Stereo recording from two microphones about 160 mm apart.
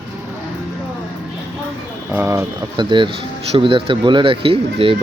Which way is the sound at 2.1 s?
15° right (ahead or behind).